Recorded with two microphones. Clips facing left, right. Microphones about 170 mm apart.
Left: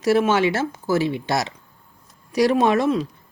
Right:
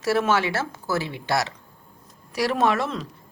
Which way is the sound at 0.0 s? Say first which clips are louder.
Left 4 dB; 20° left (ahead or behind).